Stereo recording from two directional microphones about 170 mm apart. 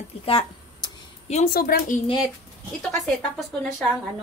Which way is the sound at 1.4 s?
60° left (ahead or behind).